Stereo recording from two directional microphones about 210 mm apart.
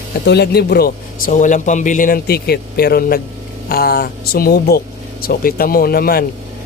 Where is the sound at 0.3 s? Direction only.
50° left (ahead or behind).